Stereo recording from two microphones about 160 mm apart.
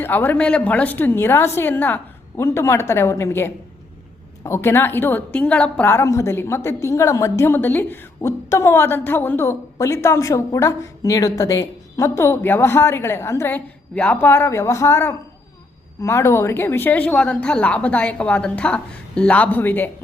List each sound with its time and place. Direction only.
0.0 s a woman's voice: 10° left (ahead or behind)